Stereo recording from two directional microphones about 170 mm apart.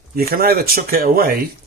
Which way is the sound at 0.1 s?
60° right (ahead or behind).